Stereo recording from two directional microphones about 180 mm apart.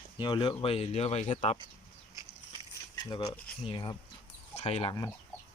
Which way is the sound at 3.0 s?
25° left (ahead or behind).